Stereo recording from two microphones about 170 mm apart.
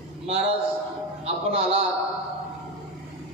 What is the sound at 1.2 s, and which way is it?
Speech, 35° right (ahead or behind).